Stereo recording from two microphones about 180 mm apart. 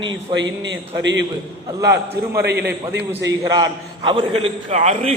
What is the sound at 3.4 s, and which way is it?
A man's voice, 20° right (ahead or behind).